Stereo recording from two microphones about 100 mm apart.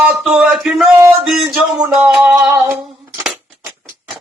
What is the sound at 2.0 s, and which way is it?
Speech, 10° right (ahead or behind).